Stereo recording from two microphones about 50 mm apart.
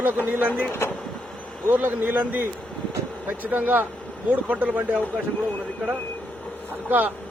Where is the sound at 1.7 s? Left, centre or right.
Right.